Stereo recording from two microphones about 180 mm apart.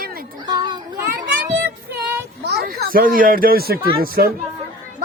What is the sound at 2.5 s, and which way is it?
Speech, 60° right (ahead or behind).